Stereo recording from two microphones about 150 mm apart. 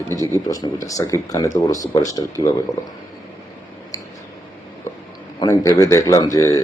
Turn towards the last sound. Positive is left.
turn(degrees=20)  # may be behind; listen again after turning